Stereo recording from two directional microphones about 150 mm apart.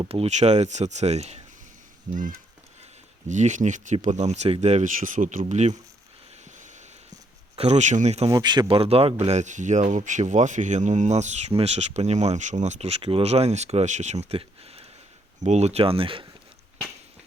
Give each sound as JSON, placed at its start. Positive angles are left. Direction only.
{"t": 0.0, "sound": "speech", "side_deg": -40}
{"t": 2.1, "sound": "a sound", "side_deg": -60}
{"t": 3.2, "sound": "speech", "side_deg": -55}
{"t": 5.4, "sound": "speech", "side_deg": -50}
{"t": 6.4, "sound": "a sound", "side_deg": -55}
{"t": 8.3, "sound": "speech", "side_deg": -25}